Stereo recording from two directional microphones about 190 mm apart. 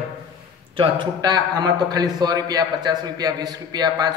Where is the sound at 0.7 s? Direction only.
25° right (ahead or behind).